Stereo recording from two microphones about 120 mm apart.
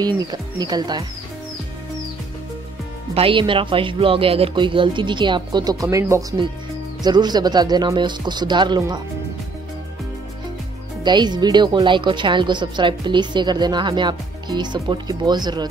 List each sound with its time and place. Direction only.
0.0 s speech: 35° right (ahead or behind)
3.2 s speech: 45° right (ahead or behind); by 6.2 s 25° right (ahead or behind)
7.0 s speech: 35° right (ahead or behind)
11.1 s speech: 35° right (ahead or behind)